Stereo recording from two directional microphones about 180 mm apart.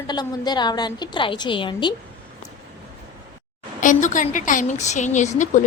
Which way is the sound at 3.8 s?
45° left (ahead or behind).